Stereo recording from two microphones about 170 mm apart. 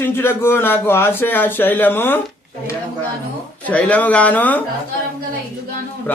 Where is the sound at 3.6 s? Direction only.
10° left (ahead or behind).